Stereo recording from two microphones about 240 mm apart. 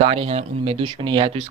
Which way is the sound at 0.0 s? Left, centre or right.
Right.